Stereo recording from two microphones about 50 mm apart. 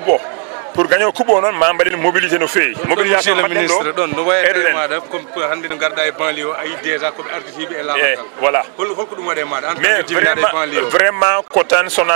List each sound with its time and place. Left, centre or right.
0.7 s a man's voice: right